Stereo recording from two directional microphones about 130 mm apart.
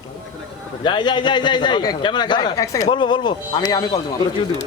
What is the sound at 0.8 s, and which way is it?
A man's voice, 35° left (ahead or behind).